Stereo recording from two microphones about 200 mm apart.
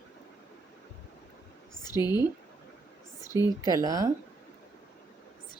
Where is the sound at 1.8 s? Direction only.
20° left (ahead or behind).